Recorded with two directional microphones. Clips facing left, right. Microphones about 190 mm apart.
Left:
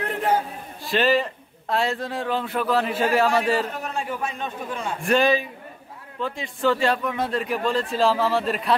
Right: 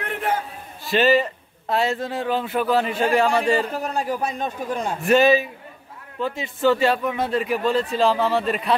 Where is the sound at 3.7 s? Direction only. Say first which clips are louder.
Right 4 dB; 35° right (ahead or behind).